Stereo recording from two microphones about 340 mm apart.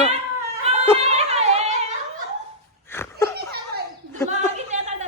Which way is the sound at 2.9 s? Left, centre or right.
Centre.